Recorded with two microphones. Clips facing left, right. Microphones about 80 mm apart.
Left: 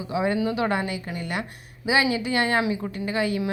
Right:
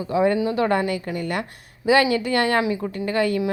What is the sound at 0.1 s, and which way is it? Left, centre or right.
A woman's voice, right.